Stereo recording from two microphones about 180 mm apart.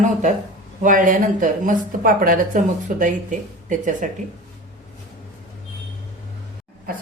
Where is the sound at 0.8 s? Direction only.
45° right (ahead or behind).